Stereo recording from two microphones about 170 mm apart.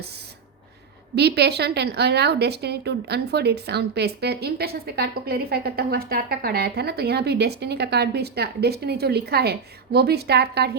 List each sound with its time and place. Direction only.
1.1 s a woman's voice: 75° right (ahead or behind)